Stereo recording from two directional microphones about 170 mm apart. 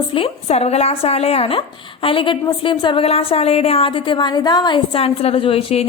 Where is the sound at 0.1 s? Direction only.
35° left (ahead or behind).